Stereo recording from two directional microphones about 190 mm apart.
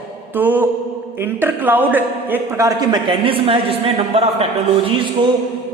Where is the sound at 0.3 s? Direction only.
10° right (ahead or behind); by 4.4 s 30° right (ahead or behind).